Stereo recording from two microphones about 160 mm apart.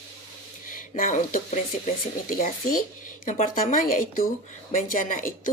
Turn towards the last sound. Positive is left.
turn(degrees=55)  # may be behind; listen again after turning